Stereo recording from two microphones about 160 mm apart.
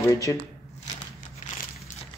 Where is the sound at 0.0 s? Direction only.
20° left (ahead or behind).